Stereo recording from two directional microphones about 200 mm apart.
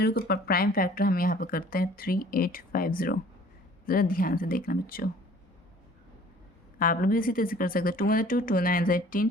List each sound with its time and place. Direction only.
0.0 s speech: 55° left (ahead or behind)
6.7 s speech: 45° left (ahead or behind)